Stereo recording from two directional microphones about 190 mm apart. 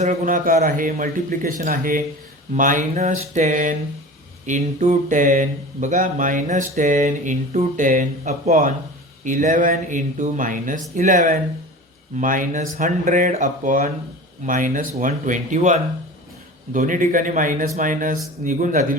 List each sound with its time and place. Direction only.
0.0 s speech: 40° right (ahead or behind)